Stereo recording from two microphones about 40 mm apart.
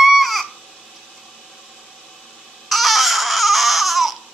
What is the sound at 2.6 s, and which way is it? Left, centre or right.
Baby cry, centre.